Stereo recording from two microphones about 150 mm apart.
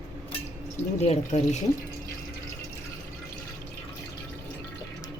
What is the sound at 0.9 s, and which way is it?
Speech, 45° left (ahead or behind).